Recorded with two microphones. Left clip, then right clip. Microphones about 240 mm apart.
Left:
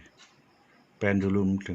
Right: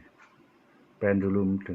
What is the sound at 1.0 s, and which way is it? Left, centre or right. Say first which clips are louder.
Speech: right 1 dB; left.